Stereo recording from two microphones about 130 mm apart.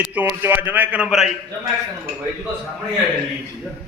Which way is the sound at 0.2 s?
15° right (ahead or behind).